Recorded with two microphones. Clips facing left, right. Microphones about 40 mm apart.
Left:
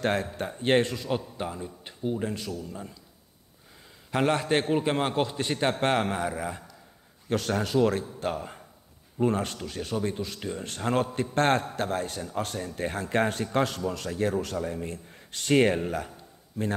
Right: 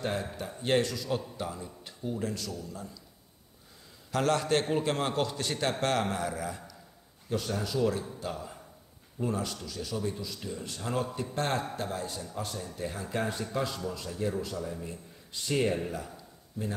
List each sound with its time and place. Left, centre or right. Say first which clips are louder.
0.4 s a man's voice: left 3 dB; left
4.1 s a man's voice: left 2 dB; left
7.2 s a man's voice: left 5 dB; left